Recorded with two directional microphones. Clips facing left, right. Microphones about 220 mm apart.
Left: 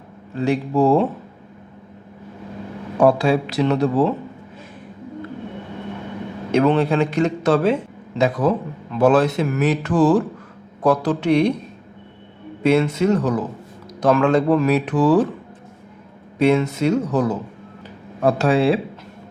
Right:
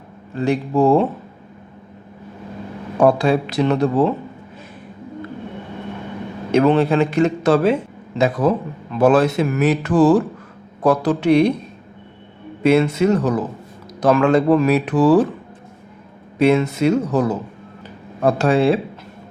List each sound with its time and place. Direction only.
0.3 s a man's voice: centre (ahead or behind)
3.0 s a man's voice: 5° left (ahead or behind)
6.5 s a man's voice: 5° right (ahead or behind)
12.6 s speech: 5° right (ahead or behind)
16.4 s speech: 5° right (ahead or behind)
18.2 s a man's voice: centre (ahead or behind)